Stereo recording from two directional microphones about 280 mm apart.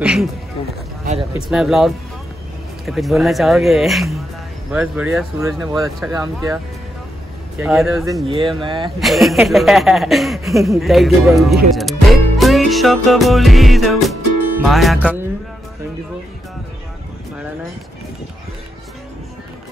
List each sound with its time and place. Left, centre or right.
0.0 s a sound: centre
1.5 s speech: centre
5.8 s speech: centre
6.1 s speech: centre
8.5 s speech: centre
9.0 s speech: centre